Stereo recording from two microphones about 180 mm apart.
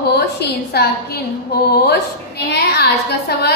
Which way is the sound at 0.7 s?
65° left (ahead or behind).